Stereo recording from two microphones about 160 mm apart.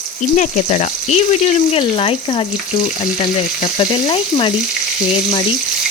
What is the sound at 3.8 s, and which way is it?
Speech, 35° left (ahead or behind).